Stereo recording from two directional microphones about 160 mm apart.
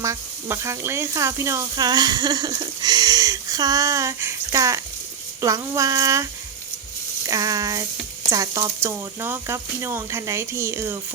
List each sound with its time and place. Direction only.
0.0 s speech: 15° right (ahead or behind)
7.3 s speech: 20° right (ahead or behind)